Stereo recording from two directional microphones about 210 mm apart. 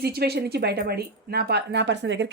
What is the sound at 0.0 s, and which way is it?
Speech, 50° right (ahead or behind).